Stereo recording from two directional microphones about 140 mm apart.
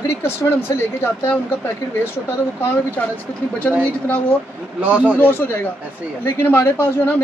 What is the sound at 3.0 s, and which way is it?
Speech, 10° left (ahead or behind).